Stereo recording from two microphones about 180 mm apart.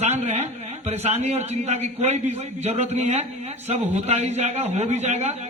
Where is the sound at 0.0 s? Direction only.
40° right (ahead or behind).